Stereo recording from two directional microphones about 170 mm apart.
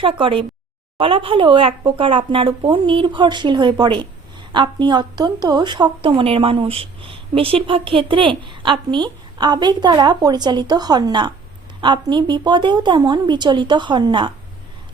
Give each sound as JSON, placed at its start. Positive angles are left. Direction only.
{"t": 0.0, "sound": "a woman's voice", "side_deg": -30}